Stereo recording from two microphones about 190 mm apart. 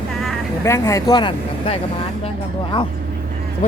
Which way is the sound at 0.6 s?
15° left (ahead or behind).